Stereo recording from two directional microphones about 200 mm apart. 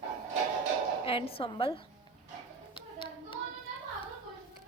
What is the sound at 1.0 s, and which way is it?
Speech, 25° left (ahead or behind).